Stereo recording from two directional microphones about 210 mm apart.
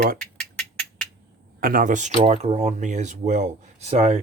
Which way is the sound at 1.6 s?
40° right (ahead or behind).